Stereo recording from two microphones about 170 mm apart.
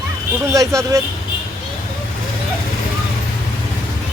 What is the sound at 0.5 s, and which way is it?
Speech, 20° right (ahead or behind).